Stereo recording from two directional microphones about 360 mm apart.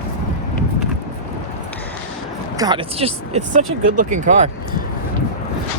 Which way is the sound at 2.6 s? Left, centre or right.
Centre.